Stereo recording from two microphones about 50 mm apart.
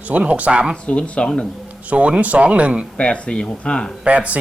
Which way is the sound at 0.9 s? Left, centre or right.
Left.